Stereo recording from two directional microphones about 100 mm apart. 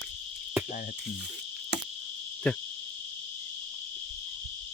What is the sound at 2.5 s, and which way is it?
Cricket, 10° left (ahead or behind).